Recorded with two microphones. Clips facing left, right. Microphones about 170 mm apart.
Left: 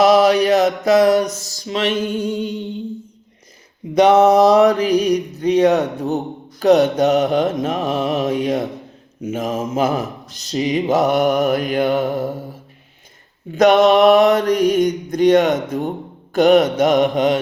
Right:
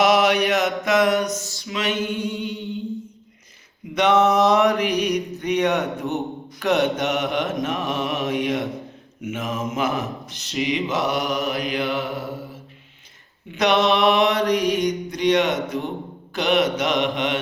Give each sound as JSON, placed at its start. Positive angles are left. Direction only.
{"t": 0.0, "sound": "mantra", "side_deg": 35}
{"t": 3.9, "sound": "mantra", "side_deg": 35}
{"t": 13.5, "sound": "mantra", "side_deg": 45}